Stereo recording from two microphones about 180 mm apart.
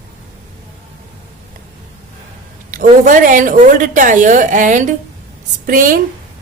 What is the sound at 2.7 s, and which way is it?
A woman's voice, 45° right (ahead or behind).